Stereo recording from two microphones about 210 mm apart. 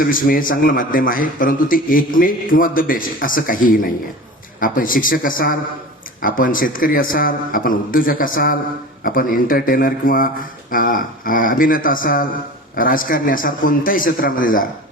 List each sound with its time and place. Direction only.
0.0 s a man's voice: 40° left (ahead or behind)